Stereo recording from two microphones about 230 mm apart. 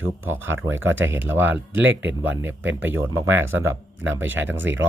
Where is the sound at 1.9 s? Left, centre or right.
Right.